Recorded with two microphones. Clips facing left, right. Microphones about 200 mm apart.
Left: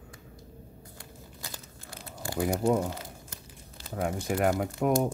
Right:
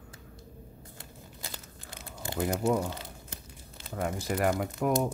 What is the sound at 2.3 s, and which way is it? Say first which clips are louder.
Speech: left 2 dB; 5° right (ahead or behind).